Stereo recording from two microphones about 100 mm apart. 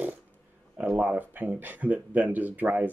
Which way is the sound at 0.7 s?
15° right (ahead or behind).